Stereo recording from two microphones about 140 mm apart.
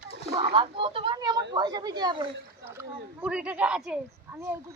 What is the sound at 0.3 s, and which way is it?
Speech, 40° right (ahead or behind).